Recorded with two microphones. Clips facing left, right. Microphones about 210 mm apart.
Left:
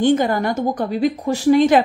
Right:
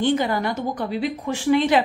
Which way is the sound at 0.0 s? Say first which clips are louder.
Left 5 dB; 45° left (ahead or behind).